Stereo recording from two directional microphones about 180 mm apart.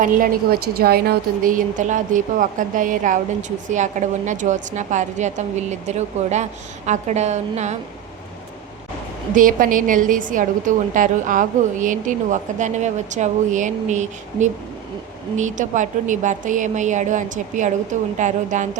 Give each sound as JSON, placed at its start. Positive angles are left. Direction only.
{"t": 0.0, "sound": "a woman's voice", "side_deg": -50}
{"t": 9.3, "sound": "a woman's voice", "side_deg": -50}